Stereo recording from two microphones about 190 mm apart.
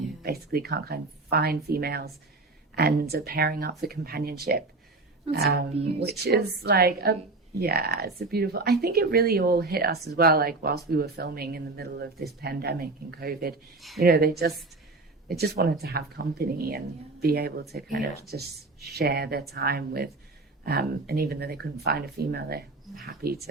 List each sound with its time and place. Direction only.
0.2 s speech: 55° right (ahead or behind)